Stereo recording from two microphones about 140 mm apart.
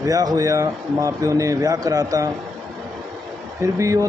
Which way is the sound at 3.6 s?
20° right (ahead or behind).